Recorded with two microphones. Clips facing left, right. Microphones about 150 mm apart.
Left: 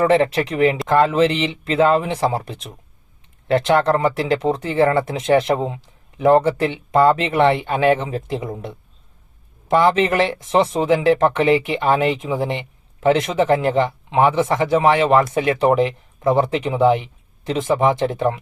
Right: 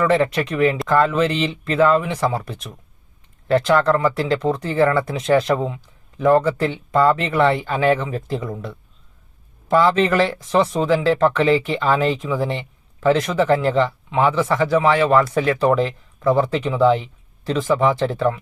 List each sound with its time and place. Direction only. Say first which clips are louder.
0.0 s speech: left 2 dB; 25° left (ahead or behind)